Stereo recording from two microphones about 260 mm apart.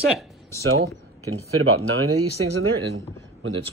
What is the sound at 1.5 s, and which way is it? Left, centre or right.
Speech, right.